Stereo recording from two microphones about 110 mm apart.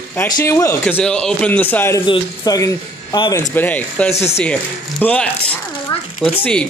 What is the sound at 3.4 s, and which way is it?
Speech, 15° left (ahead or behind).